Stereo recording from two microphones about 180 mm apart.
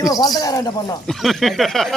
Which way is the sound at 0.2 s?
20° left (ahead or behind).